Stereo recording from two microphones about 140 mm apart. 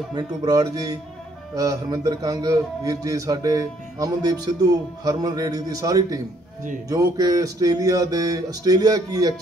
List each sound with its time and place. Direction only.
0.1 s a man's voice: 30° right (ahead or behind)